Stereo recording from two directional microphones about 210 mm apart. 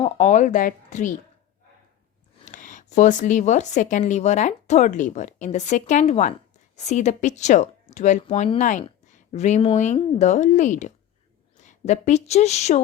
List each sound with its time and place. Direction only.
0.0 s speech: 30° left (ahead or behind)
2.4 s a woman's voice: 35° left (ahead or behind)